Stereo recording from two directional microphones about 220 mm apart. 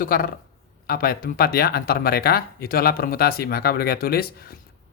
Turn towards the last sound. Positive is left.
turn(degrees=45)  # may be behind; listen again after turning